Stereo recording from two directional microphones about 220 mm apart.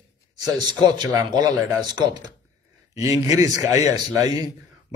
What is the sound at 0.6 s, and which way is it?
A man's voice, 20° right (ahead or behind).